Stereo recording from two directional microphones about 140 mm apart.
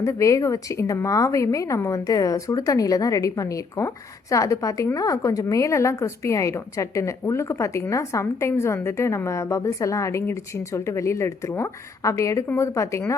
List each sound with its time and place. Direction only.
0.0 s speech: 20° left (ahead or behind)